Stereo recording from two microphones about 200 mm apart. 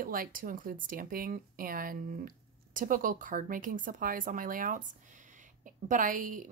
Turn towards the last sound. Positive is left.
turn(degrees=-40)  # may be behind; listen again after turning